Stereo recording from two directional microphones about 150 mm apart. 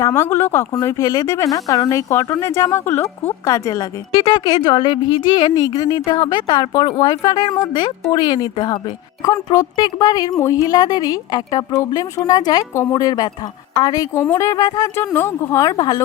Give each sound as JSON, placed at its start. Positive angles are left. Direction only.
{"t": 0.0, "sound": "speech", "side_deg": 20}